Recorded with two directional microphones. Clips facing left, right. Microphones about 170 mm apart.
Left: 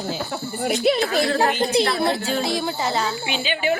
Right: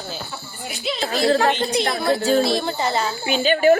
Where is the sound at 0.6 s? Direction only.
60° left (ahead or behind).